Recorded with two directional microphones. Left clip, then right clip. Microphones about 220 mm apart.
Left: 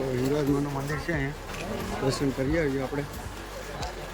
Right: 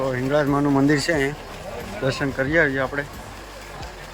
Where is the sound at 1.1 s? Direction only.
30° right (ahead or behind).